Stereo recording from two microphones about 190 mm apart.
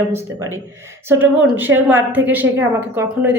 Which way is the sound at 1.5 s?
10° right (ahead or behind).